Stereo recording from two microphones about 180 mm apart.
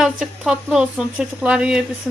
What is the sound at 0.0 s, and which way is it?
Speech, 5° right (ahead or behind).